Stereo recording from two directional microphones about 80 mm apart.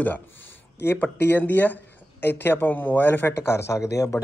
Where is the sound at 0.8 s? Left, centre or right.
Left.